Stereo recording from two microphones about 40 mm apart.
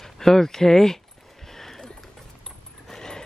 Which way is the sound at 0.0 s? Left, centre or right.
Centre.